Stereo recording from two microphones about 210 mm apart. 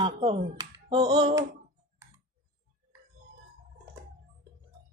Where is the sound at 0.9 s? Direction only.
20° right (ahead or behind).